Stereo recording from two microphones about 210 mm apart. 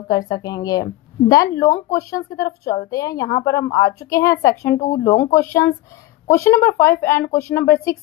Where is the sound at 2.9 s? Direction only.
15° left (ahead or behind).